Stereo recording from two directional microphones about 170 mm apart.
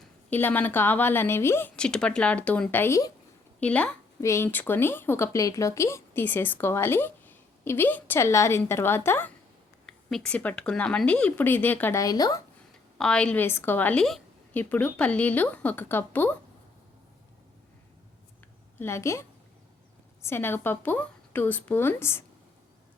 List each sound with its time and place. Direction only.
0.0 s speech: 10° left (ahead or behind)
13.0 s speech: 5° left (ahead or behind)
18.8 s speech: 15° left (ahead or behind)
20.2 s speech: 15° left (ahead or behind)